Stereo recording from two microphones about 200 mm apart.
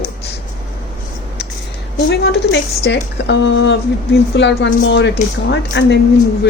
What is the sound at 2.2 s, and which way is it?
Speech, 60° left (ahead or behind).